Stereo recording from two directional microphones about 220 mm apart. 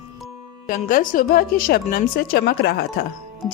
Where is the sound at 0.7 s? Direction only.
40° left (ahead or behind).